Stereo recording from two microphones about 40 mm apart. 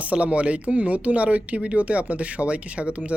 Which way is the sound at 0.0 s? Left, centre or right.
Right.